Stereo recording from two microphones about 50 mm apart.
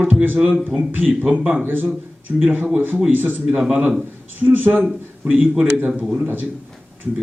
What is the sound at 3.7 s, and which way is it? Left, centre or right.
Speech, right.